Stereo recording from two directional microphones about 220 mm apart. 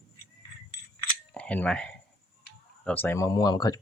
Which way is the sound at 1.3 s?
5° left (ahead or behind).